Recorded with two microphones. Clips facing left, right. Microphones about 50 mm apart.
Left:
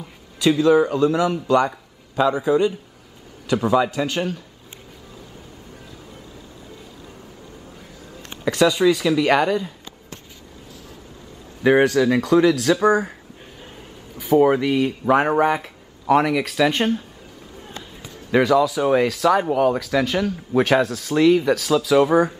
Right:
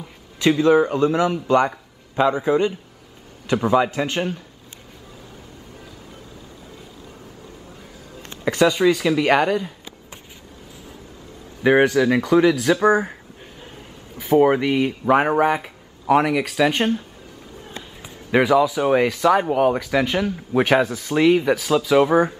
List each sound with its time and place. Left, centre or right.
0.4 s a man's voice: right
8.2 s speech: centre
11.6 s speech: centre
14.4 s speech: centre
18.0 s speech: centre